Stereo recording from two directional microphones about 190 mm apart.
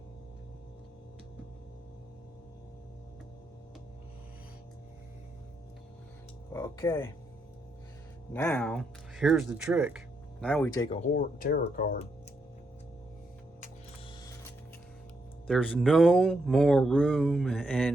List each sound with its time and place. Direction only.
6.5 s speech: 15° left (ahead or behind)
8.3 s speech: 10° left (ahead or behind)
10.4 s speech: 10° left (ahead or behind)
10.8 s speech: 40° left (ahead or behind)
15.4 s speech: centre (ahead or behind)